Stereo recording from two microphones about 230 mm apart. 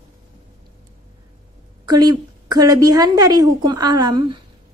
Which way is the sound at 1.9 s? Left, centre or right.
Centre.